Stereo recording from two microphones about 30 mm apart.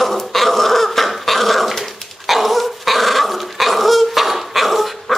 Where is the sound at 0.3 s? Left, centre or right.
Centre.